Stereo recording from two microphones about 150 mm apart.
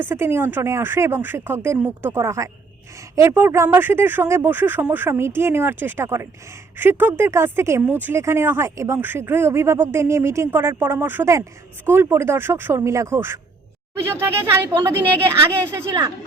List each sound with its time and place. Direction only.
0.0 s speech: 15° right (ahead or behind)